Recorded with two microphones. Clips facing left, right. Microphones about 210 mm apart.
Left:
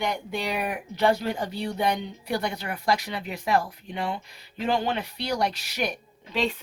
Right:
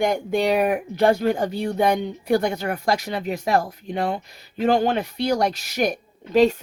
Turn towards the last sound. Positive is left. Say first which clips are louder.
# right 11 dB
turn(degrees=-45)  # may be behind; listen again after turning